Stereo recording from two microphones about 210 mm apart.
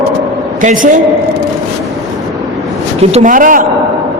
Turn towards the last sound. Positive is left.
turn(degrees=-40)  # may be behind; listen again after turning